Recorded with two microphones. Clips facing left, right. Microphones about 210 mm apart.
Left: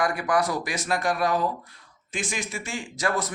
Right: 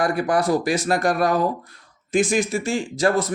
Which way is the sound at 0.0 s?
30° right (ahead or behind).